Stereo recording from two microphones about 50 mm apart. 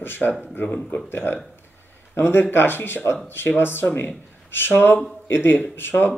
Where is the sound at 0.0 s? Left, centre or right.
Left.